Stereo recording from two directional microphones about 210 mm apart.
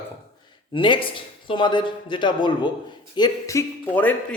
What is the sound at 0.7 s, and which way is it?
A man's voice, 25° left (ahead or behind).